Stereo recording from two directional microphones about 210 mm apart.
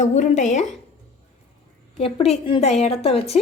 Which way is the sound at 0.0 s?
35° left (ahead or behind).